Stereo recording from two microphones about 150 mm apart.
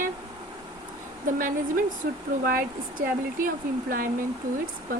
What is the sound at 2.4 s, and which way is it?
Speech, 75° right (ahead or behind).